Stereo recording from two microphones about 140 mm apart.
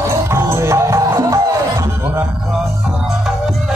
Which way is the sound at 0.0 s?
20° right (ahead or behind).